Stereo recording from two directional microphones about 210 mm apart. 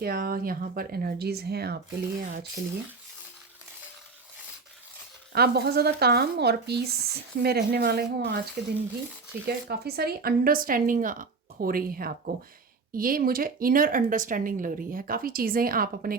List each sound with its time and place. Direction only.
0.0 s speech: 45° right (ahead or behind)
5.3 s speech: 45° right (ahead or behind)